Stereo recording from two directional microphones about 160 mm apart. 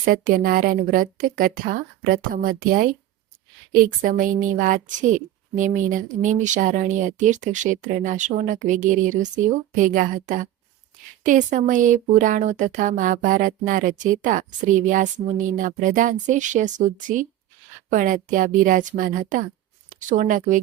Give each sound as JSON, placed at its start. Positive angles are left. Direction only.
{"t": 0.0, "sound": "a woman's voice", "side_deg": -60}